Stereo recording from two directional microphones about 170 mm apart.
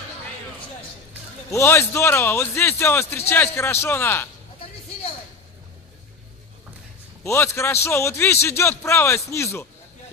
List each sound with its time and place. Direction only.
1.5 s a man's voice: 15° left (ahead or behind)
7.2 s a man's voice: 15° left (ahead or behind)